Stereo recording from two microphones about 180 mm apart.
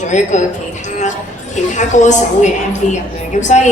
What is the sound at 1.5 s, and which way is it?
Speech, 40° left (ahead or behind).